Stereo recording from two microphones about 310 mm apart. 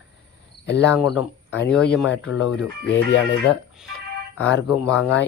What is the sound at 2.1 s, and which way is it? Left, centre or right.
Speech, left.